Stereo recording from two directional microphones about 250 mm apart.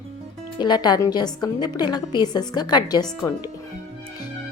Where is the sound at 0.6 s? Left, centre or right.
Centre.